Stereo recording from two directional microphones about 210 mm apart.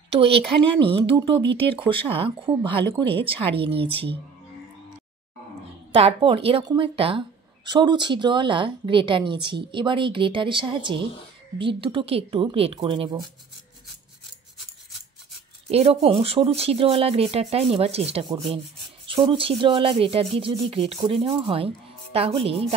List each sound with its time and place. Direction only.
1.0 s speech: 25° right (ahead or behind)
5.9 s speech: 30° right (ahead or behind)
15.7 s speech: 30° right (ahead or behind)